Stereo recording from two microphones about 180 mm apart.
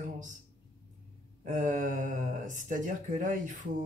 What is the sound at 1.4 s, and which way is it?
Speech, 45° right (ahead or behind).